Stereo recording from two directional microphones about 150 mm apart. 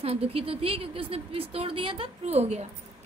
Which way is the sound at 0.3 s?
40° right (ahead or behind).